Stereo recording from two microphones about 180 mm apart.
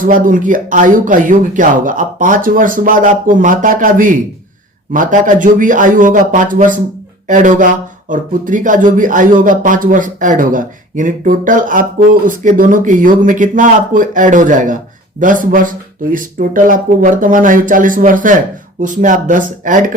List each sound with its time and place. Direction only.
0.0 s speech: 50° right (ahead or behind)